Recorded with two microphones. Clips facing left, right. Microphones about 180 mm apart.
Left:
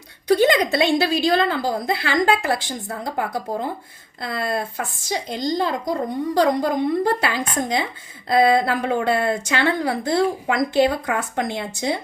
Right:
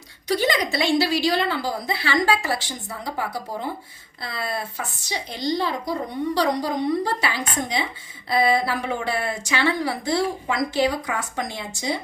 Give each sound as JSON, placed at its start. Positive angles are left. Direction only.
{"t": 0.3, "sound": "a woman's voice", "side_deg": 55}